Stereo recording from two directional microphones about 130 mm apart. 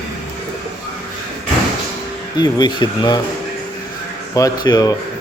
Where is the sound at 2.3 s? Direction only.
30° left (ahead or behind).